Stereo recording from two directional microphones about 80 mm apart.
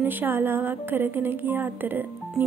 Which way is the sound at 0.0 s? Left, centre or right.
Right.